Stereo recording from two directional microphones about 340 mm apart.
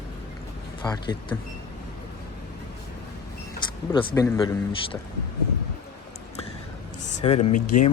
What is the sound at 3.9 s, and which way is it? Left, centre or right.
Speech, centre.